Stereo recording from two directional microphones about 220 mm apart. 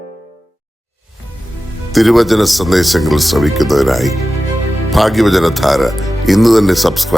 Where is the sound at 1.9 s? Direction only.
Centre (ahead or behind).